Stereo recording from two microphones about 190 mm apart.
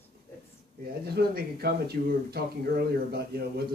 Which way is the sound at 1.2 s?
55° right (ahead or behind).